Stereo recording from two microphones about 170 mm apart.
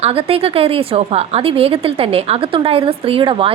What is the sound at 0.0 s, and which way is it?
A woman's voice, 35° right (ahead or behind).